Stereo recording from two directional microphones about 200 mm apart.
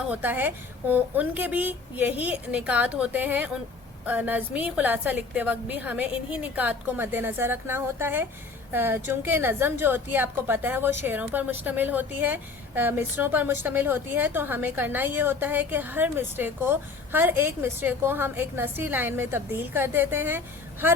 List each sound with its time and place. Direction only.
0.1 s a woman's voice: 10° right (ahead or behind)